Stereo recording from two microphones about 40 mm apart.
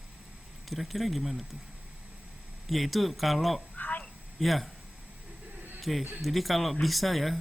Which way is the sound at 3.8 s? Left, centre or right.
Left.